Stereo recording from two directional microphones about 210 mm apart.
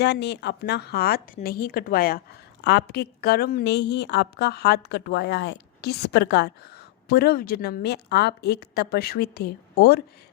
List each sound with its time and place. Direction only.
0.0 s a woman's voice: 55° left (ahead or behind)